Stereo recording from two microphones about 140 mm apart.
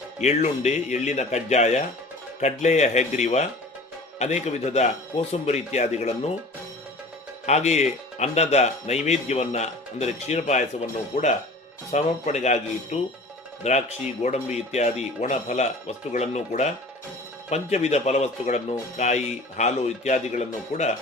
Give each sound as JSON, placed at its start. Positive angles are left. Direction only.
{"t": 0.2, "sound": "speech", "side_deg": 55}
{"t": 7.4, "sound": "speech", "side_deg": 55}